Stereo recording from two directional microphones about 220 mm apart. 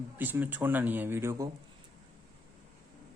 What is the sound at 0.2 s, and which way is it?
Speech, 10° right (ahead or behind).